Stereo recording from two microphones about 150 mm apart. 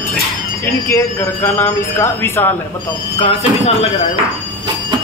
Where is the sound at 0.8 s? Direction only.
15° left (ahead or behind).